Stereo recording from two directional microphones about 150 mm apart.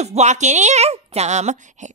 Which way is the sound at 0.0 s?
45° right (ahead or behind).